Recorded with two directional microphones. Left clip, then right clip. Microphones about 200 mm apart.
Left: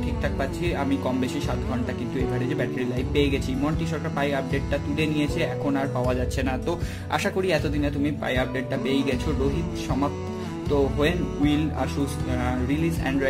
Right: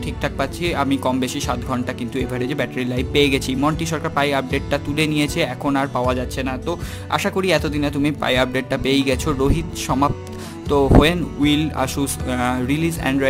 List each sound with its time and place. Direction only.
0.2 s speech: 30° right (ahead or behind)
6.3 s speech: 20° right (ahead or behind)
10.7 s speech: 35° right (ahead or behind)